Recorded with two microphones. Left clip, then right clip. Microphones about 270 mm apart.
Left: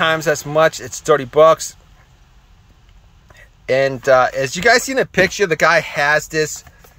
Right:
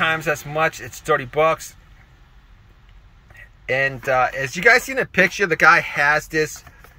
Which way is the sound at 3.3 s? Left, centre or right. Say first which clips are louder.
Left 5 dB; centre.